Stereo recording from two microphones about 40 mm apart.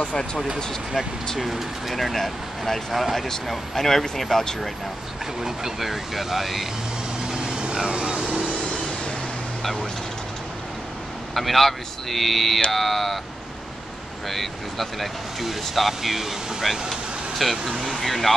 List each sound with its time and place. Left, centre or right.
0.0 s speech: left
1.4 s speech: centre
5.4 s speech: centre
7.2 s vehicle: centre
11.3 s speech: centre
14.3 s speech: centre